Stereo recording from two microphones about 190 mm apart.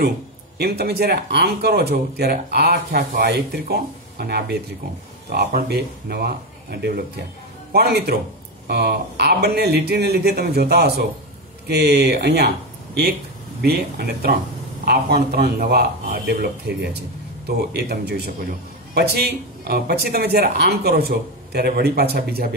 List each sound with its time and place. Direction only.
0.6 s speech: 55° right (ahead or behind)
13.6 s speech: 55° right (ahead or behind)